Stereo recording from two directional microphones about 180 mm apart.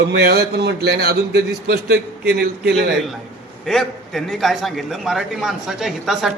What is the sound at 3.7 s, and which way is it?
A man's voice, centre (ahead or behind).